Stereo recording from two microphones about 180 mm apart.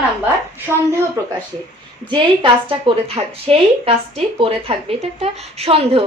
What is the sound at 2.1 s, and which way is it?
A woman's voice, 25° right (ahead or behind).